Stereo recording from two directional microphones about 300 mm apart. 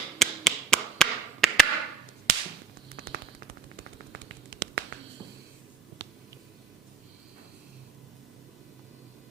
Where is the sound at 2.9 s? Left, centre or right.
Right.